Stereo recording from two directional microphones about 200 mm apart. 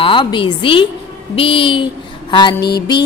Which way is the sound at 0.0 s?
25° left (ahead or behind).